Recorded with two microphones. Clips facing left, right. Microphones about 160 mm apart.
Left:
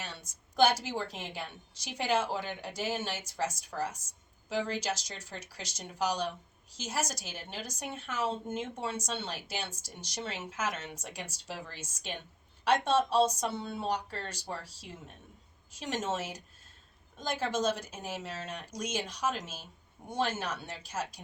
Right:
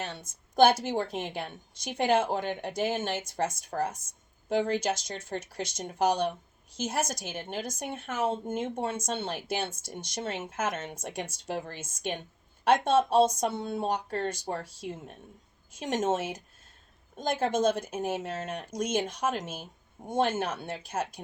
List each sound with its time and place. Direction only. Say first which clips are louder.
0.0 s a woman's voice: right 6 dB; 50° right (ahead or behind)